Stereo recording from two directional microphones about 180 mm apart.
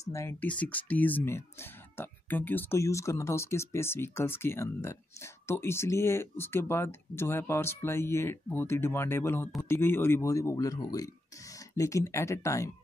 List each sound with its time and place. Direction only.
0.1 s speech: 15° left (ahead or behind)